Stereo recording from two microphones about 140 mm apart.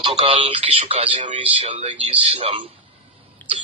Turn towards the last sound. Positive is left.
turn(degrees=15)  # may be behind; listen again after turning